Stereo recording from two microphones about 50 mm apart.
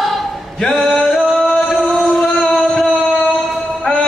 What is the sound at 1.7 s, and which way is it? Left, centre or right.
Music, centre.